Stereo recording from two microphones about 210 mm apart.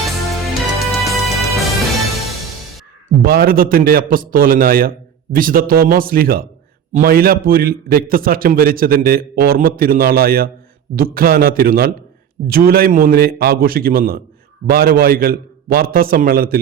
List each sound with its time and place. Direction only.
0.0 s music: centre (ahead or behind)
3.2 s a man's voice: 45° right (ahead or behind)